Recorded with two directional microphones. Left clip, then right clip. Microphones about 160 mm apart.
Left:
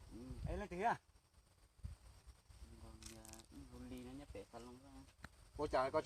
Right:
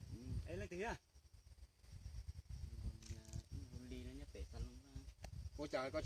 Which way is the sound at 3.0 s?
55° left (ahead or behind).